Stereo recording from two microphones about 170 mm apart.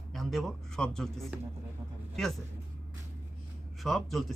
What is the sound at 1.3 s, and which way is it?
Speech, 10° right (ahead or behind).